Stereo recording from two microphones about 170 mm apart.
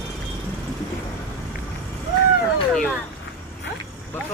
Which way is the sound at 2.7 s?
5° left (ahead or behind).